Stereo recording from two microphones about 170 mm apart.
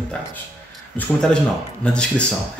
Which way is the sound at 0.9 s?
5° left (ahead or behind).